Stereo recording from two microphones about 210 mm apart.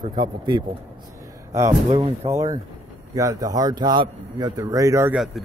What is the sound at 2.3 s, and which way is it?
A man's voice, 20° right (ahead or behind).